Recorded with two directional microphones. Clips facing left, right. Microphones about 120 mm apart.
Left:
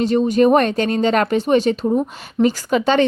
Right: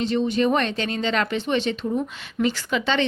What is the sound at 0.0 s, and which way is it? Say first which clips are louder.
A woman's voice: left 7 dB; 45° left (ahead or behind).